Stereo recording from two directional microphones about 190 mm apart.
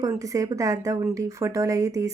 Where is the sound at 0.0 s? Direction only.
15° right (ahead or behind).